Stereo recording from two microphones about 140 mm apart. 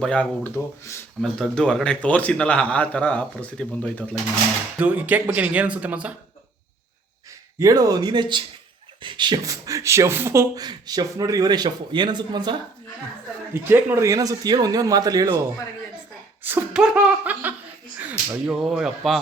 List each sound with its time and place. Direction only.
0.0 s a man's voice: 10° left (ahead or behind)
1.2 s a man's voice: 5° left (ahead or behind)
4.8 s speech: 10° right (ahead or behind)
7.6 s speech: 25° right (ahead or behind)
13.5 s speech: 15° right (ahead or behind)
16.4 s speech: 15° right (ahead or behind)